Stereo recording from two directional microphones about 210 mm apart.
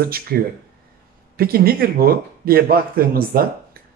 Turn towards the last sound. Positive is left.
turn(degrees=-45)  # may be behind; listen again after turning